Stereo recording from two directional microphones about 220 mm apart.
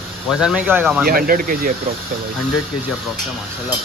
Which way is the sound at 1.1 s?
40° right (ahead or behind).